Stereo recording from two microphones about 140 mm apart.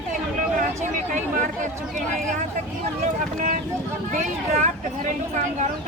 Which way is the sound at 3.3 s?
65° right (ahead or behind).